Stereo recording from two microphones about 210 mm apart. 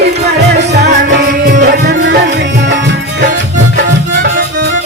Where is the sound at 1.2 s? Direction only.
45° right (ahead or behind).